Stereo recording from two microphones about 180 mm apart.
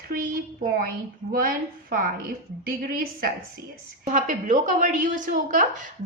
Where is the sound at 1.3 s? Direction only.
55° right (ahead or behind).